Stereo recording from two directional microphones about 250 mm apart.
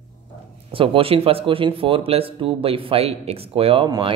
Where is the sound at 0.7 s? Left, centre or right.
Right.